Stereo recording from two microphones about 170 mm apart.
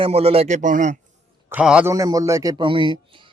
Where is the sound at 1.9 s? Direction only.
20° right (ahead or behind).